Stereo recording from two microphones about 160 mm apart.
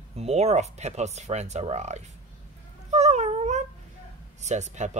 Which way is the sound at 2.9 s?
45° right (ahead or behind).